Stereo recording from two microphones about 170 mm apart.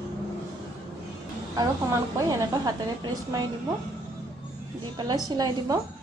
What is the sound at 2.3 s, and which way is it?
Speech, 20° right (ahead or behind).